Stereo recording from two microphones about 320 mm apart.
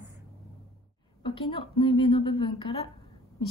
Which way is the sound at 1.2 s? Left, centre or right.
Centre.